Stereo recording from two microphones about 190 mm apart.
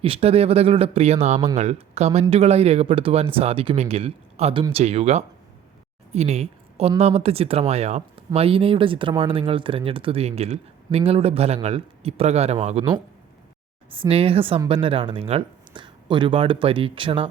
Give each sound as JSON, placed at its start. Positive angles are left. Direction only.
{"t": 0.0, "sound": "speech", "side_deg": -30}